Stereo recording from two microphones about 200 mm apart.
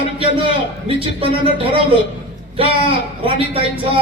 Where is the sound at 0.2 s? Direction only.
25° right (ahead or behind).